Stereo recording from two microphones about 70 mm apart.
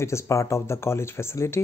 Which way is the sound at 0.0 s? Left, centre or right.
Left.